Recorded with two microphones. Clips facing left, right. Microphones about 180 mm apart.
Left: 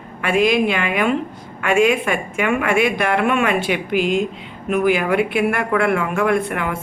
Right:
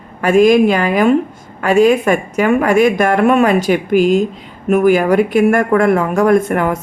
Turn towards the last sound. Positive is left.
turn(degrees=-45)  # may be behind; listen again after turning